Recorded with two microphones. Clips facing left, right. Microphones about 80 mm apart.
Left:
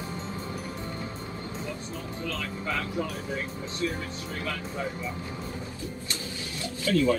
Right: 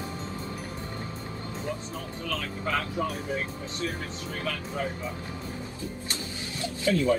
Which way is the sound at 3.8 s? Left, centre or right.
Right.